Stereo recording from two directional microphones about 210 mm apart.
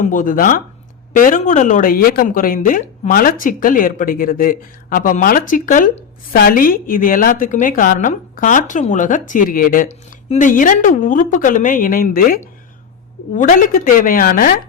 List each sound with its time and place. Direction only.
0.0 s a woman's voice: 40° left (ahead or behind)